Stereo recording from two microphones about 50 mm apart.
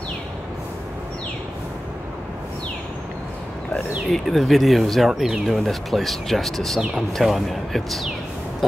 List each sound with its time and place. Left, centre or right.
4.1 s speech: centre
5.1 s speech: centre
5.5 s speech: centre